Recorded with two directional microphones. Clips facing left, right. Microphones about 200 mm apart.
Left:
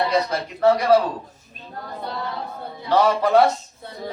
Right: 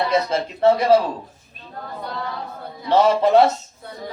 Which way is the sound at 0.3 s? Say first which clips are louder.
Right 1 dB; 25° right (ahead or behind).